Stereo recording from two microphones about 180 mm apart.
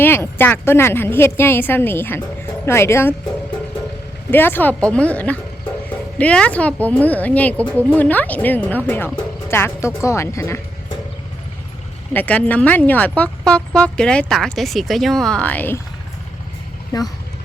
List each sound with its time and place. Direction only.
0.0 s a woman's voice: 10° left (ahead or behind)
4.3 s a woman's voice: 10° left (ahead or behind)
12.1 s speech: 10° left (ahead or behind)
16.9 s speech: 20° left (ahead or behind)